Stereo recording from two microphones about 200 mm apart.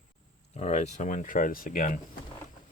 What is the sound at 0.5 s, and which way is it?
Speech, 35° left (ahead or behind).